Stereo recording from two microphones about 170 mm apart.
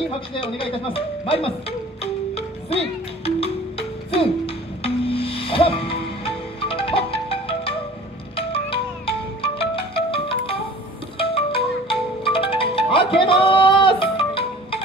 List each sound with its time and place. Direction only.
0.3 s speech: 30° left (ahead or behind)
2.3 s music: 35° left (ahead or behind)
11.1 s marimba: 35° left (ahead or behind)